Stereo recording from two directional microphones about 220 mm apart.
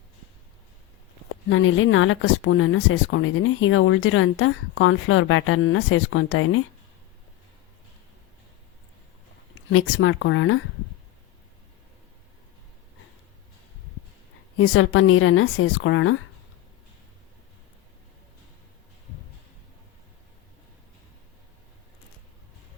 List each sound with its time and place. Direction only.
1.3 s speech: 65° left (ahead or behind)
9.7 s speech: 65° left (ahead or behind)
14.6 s speech: 65° left (ahead or behind)